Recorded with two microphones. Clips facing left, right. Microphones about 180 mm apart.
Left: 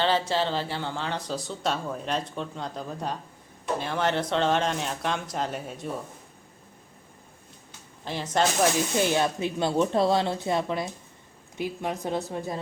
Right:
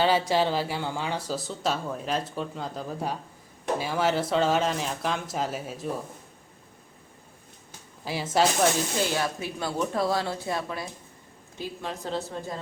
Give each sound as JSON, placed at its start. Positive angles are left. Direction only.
{"t": 0.0, "sound": "speech", "side_deg": -10}
{"t": 8.0, "sound": "speech", "side_deg": -5}
{"t": 9.0, "sound": "speech", "side_deg": 20}